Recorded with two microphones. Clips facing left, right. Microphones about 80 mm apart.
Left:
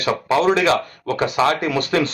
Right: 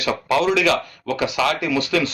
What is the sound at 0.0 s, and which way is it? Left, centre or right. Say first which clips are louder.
A man's voice: left 2 dB; left.